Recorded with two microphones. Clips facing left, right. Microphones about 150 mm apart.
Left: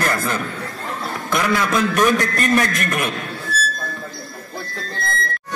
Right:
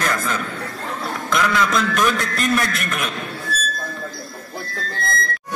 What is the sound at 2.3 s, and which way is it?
Speech, 60° left (ahead or behind).